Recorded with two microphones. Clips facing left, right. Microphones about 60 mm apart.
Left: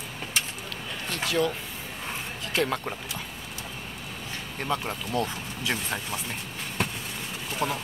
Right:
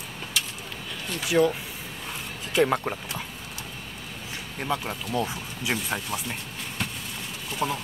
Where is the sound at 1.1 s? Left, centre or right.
Centre.